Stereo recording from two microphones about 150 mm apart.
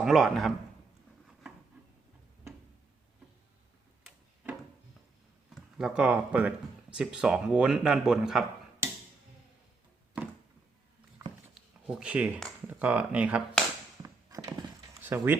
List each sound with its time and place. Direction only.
0.0 s speech: centre (ahead or behind)
5.7 s speech: 5° right (ahead or behind)
10.2 s a sound: 10° right (ahead or behind)
11.5 s a sound: 5° right (ahead or behind)
12.6 s speech: 10° right (ahead or behind)
14.0 s clip-clop: 25° right (ahead or behind)
15.0 s speech: 15° right (ahead or behind)